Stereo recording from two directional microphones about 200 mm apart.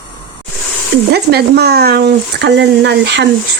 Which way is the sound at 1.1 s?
55° right (ahead or behind).